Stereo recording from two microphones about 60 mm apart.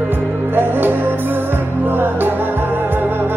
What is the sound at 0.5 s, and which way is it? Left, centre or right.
Music, right.